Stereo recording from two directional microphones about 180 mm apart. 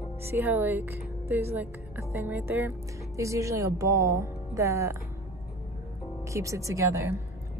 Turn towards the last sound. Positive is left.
turn(degrees=-15)  # may be behind; listen again after turning